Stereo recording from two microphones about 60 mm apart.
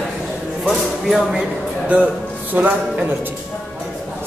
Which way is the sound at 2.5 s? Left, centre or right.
Right.